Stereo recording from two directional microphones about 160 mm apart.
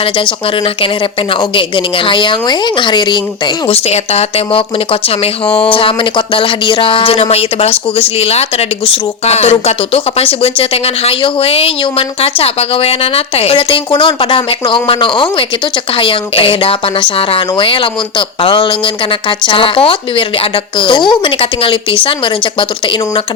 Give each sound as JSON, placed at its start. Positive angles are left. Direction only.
{"t": 0.0, "sound": "speech", "side_deg": 35}